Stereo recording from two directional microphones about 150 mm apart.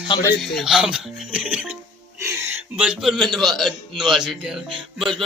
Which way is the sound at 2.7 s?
5° right (ahead or behind).